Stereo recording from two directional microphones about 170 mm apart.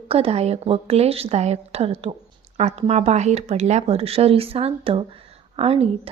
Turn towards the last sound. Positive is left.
turn(degrees=-35)  # may be behind; listen again after turning